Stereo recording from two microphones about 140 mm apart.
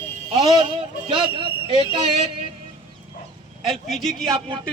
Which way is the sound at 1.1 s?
35° right (ahead or behind).